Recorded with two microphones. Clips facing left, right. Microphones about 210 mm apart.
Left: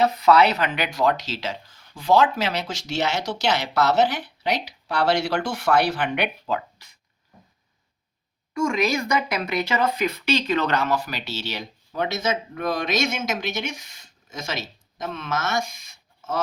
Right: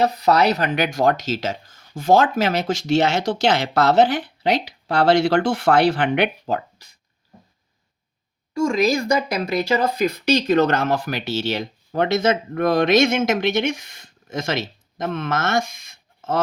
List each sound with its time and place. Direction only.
0.0 s speech: 35° right (ahead or behind)
8.6 s speech: 35° right (ahead or behind); by 16.4 s 55° right (ahead or behind)